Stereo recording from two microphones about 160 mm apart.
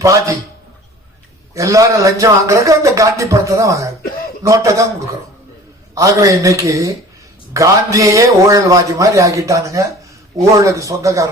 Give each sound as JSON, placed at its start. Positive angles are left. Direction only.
{"t": 1.5, "sound": "a man's voice", "side_deg": -20}
{"t": 5.9, "sound": "a man's voice", "side_deg": -20}